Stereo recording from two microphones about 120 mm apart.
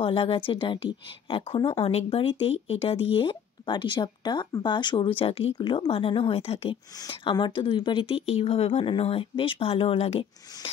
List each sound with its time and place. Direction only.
0.0 s speech: 45° left (ahead or behind)
7.1 s speech: 40° left (ahead or behind); by 10.7 s 60° left (ahead or behind)